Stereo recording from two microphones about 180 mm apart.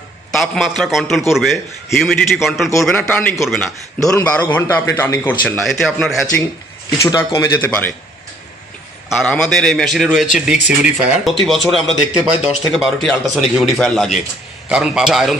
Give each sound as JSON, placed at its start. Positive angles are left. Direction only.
{"t": 0.3, "sound": "a man's voice", "side_deg": 0}
{"t": 5.6, "sound": "a man's voice", "side_deg": 0}
{"t": 7.0, "sound": "a man's voice", "side_deg": 15}
{"t": 9.1, "sound": "a man's voice", "side_deg": 5}